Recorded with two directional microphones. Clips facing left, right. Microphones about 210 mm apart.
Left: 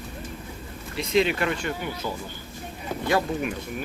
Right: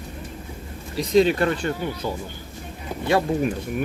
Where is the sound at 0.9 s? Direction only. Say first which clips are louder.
Right 5 dB; 35° right (ahead or behind).